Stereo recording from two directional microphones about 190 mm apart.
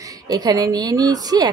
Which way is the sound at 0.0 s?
20° right (ahead or behind).